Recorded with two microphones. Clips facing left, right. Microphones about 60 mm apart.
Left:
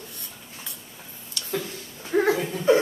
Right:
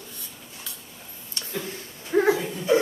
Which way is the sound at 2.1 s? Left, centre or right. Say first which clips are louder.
Right 1 dB; centre.